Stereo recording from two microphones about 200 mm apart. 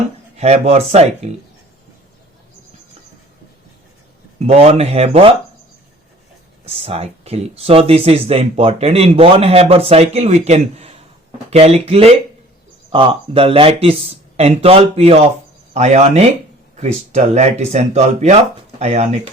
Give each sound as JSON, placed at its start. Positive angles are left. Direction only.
{"t": 0.3, "sound": "speech", "side_deg": -30}
{"t": 4.4, "sound": "speech", "side_deg": -30}
{"t": 6.7, "sound": "speech", "side_deg": -30}